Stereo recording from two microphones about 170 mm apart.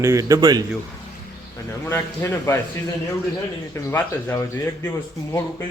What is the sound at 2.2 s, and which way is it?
Speech, 15° left (ahead or behind).